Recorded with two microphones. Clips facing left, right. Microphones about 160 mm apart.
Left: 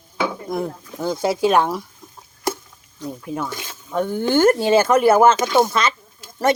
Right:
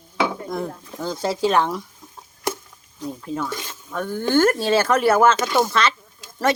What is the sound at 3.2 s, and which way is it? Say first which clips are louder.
Speech: even; 15° left (ahead or behind).